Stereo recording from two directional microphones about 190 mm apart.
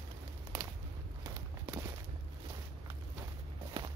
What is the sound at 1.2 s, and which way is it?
Walk, 20° right (ahead or behind).